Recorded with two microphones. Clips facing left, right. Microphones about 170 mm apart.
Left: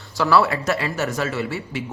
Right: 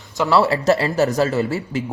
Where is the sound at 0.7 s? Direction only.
35° right (ahead or behind).